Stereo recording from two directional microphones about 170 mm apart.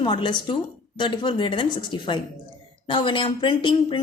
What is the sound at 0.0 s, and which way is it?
A woman's voice, 30° left (ahead or behind).